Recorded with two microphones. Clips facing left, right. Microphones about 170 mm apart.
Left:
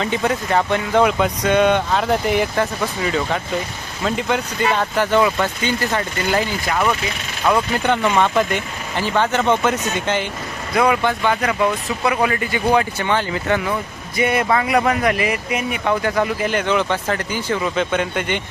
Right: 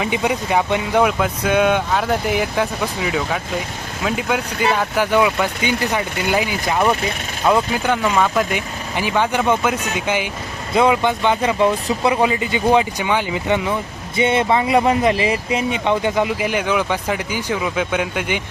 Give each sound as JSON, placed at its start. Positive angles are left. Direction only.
{"t": 0.0, "sound": "speech", "side_deg": -10}
{"t": 7.4, "sound": "speech", "side_deg": -5}
{"t": 10.8, "sound": "speech", "side_deg": -20}